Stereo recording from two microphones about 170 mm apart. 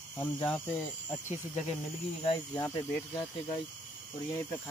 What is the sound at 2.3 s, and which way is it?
Speech, 25° left (ahead or behind).